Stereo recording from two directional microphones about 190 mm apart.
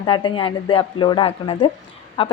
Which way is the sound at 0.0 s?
25° left (ahead or behind).